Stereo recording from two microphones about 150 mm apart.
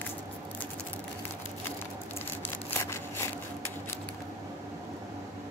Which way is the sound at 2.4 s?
15° left (ahead or behind).